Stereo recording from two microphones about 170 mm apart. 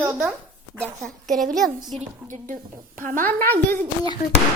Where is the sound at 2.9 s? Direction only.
50° right (ahead or behind).